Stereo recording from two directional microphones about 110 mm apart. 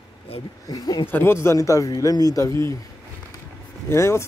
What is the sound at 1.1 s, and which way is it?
Speech, 20° left (ahead or behind).